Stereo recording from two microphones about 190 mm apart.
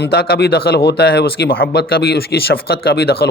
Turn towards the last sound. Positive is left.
turn(degrees=55)  # may be behind; listen again after turning